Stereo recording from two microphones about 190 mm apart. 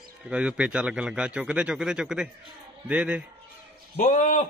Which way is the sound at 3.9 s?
35° left (ahead or behind).